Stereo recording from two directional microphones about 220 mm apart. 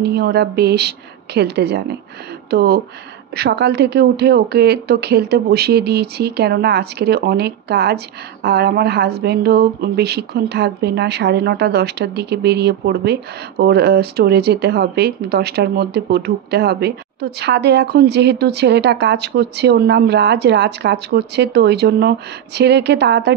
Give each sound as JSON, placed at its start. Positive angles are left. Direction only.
{"t": 0.0, "sound": "speech", "side_deg": -45}